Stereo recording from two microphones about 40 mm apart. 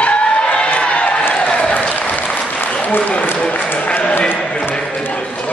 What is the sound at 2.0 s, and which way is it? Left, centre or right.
Applause, left.